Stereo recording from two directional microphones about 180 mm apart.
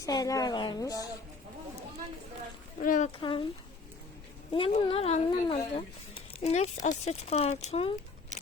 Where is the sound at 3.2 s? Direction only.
25° left (ahead or behind).